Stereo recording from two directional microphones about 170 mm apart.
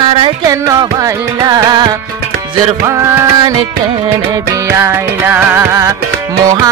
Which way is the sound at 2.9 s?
15° right (ahead or behind).